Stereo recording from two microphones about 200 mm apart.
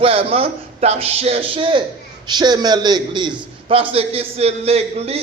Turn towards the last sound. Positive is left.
turn(degrees=-30)  # may be behind; listen again after turning